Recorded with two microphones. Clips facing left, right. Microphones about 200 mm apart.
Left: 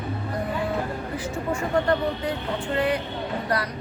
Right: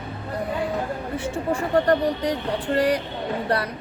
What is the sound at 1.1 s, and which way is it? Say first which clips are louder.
Speech: right 4 dB; 35° right (ahead or behind).